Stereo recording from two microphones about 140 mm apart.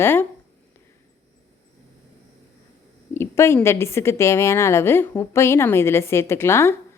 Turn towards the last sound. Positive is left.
turn(degrees=20)  # may be behind; listen again after turning